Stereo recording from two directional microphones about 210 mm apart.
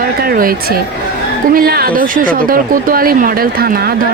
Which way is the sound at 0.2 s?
45° right (ahead or behind).